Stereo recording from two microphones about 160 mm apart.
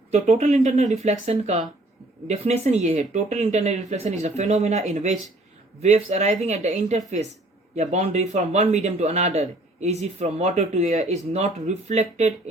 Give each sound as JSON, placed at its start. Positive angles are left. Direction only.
{"t": 0.1, "sound": "a man's voice", "side_deg": -45}